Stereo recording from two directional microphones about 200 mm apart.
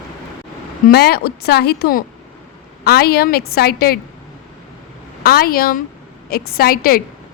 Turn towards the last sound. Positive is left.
turn(degrees=45)  # may be behind; listen again after turning